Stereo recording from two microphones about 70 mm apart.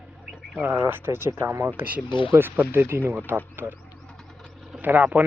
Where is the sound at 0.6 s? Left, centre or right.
Right.